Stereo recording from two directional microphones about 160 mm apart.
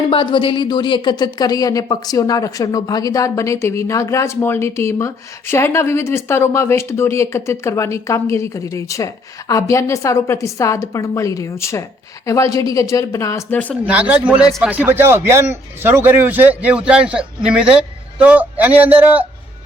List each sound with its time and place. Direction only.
0.1 s a woman's voice: 30° left (ahead or behind); by 13.7 s 10° left (ahead or behind)
13.8 s speech: 10° right (ahead or behind)